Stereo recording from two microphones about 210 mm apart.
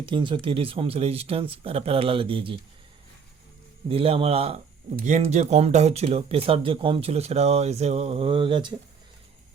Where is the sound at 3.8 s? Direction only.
25° right (ahead or behind).